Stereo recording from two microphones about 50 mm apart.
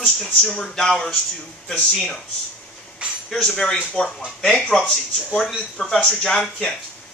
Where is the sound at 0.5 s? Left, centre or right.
Centre.